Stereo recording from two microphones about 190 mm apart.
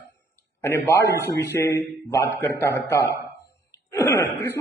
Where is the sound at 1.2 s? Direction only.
55° left (ahead or behind).